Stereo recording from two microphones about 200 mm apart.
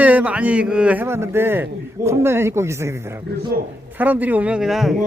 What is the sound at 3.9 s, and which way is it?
A man's voice, 10° right (ahead or behind).